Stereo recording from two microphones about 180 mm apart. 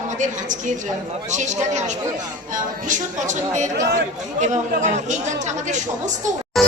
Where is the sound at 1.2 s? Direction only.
40° right (ahead or behind).